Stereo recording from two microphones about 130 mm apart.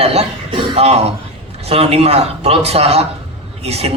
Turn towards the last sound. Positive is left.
turn(degrees=-50)  # may be behind; listen again after turning